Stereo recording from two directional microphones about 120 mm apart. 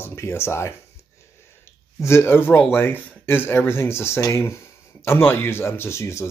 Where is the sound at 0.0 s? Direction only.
20° left (ahead or behind).